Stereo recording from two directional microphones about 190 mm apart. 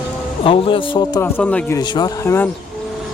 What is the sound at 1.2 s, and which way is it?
Speech, 10° left (ahead or behind).